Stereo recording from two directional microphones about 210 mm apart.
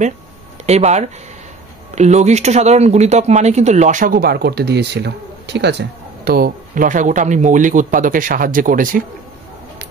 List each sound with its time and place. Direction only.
0.7 s speech: 30° right (ahead or behind)